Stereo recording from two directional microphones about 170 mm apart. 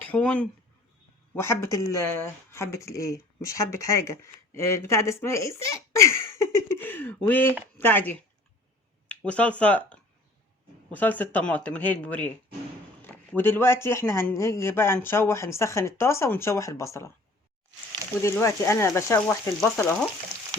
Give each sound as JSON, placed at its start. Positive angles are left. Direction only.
{"t": 0.0, "sound": "speech", "side_deg": 10}
{"t": 18.2, "sound": "speech", "side_deg": 15}